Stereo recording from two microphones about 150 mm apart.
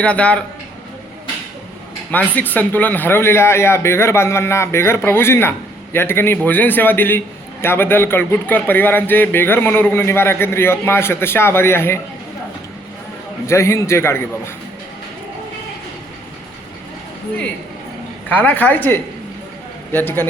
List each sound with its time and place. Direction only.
0.0 s speech: 10° left (ahead or behind)
2.0 s speech: 10° left (ahead or behind)
13.5 s speech: 20° left (ahead or behind)
18.3 s speech: 10° left (ahead or behind)